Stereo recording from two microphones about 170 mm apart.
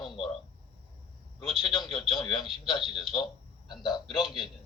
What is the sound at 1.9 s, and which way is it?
Speech, centre (ahead or behind).